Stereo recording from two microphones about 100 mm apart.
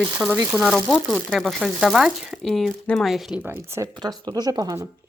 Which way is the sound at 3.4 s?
20° right (ahead or behind).